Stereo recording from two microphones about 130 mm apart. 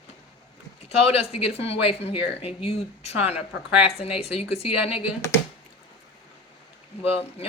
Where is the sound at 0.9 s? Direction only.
50° left (ahead or behind).